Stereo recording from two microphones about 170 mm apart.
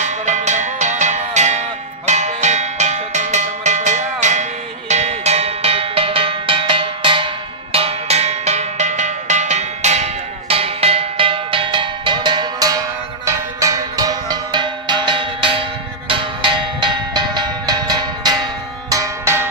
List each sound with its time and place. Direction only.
0.0 s music: 45° right (ahead or behind)
2.0 s cowbell: 45° right (ahead or behind)
16.1 s music: 30° right (ahead or behind)